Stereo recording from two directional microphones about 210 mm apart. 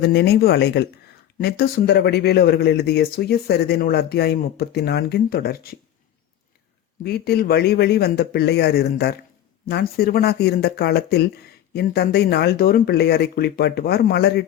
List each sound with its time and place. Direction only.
0.0 s speech: 50° left (ahead or behind)
7.0 s speech: 50° left (ahead or behind)